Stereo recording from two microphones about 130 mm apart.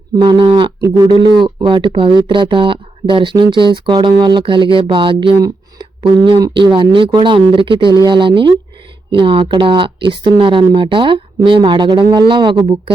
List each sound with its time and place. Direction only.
0.2 s speech: 40° right (ahead or behind)
0.8 s speech: 25° right (ahead or behind)
1.1 s speech: 40° right (ahead or behind)